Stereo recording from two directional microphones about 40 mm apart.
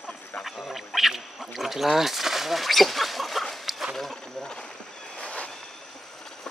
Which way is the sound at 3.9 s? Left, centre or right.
Centre.